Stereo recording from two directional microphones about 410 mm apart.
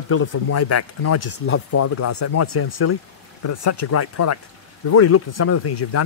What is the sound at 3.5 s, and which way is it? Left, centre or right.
A man's voice, left.